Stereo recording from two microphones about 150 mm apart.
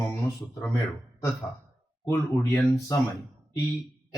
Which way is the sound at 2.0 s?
30° left (ahead or behind).